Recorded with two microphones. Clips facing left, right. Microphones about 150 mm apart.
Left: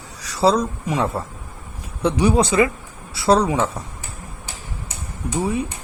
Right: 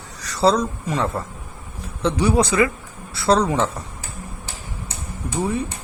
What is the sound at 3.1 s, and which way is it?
Speech, 10° left (ahead or behind).